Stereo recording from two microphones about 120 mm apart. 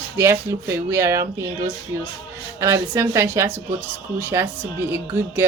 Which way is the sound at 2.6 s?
25° right (ahead or behind).